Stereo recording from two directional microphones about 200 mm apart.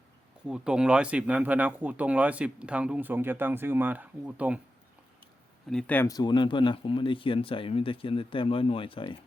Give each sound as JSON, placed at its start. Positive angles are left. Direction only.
{"t": 0.4, "sound": "speech", "side_deg": -5}
{"t": 5.7, "sound": "speech", "side_deg": 10}